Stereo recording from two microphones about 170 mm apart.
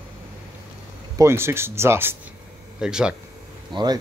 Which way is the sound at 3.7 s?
25° right (ahead or behind).